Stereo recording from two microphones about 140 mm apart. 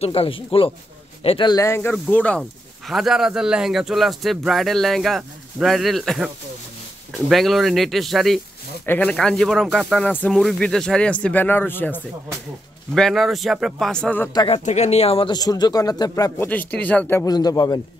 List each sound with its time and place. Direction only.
0.0 s speech: 45° left (ahead or behind)
1.5 s speech: 20° left (ahead or behind)
2.9 s speech: centre (ahead or behind)
8.8 s speech: 10° left (ahead or behind)
12.9 s speech: centre (ahead or behind)
14.6 s speech: 55° left (ahead or behind)
15.3 s speech: 30° left (ahead or behind); by 17.2 s 10° left (ahead or behind)
17.2 s speech: 25° left (ahead or behind)